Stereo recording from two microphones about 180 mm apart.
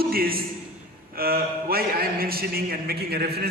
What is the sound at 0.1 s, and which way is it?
A man's voice, 55° right (ahead or behind).